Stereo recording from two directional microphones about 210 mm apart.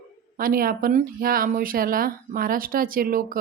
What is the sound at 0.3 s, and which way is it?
A woman's voice, 45° right (ahead or behind).